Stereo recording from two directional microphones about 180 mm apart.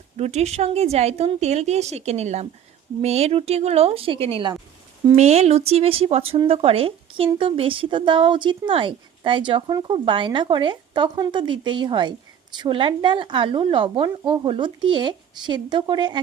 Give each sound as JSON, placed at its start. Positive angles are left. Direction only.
{"t": 0.2, "sound": "a woman's voice", "side_deg": -35}